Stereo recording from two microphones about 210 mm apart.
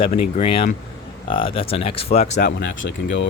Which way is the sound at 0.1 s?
30° left (ahead or behind).